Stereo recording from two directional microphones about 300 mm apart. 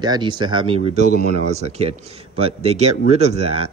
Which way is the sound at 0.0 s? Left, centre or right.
Centre.